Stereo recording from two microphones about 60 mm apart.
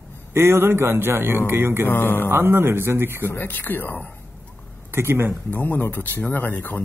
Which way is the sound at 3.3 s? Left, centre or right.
Left.